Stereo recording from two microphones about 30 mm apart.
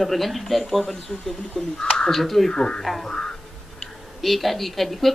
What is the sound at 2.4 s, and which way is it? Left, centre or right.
Speech, left.